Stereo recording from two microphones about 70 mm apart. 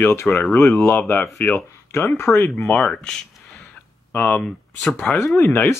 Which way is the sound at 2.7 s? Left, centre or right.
Centre.